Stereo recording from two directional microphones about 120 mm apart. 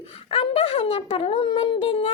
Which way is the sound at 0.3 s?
55° left (ahead or behind).